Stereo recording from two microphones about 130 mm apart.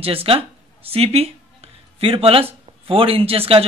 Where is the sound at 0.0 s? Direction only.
45° right (ahead or behind).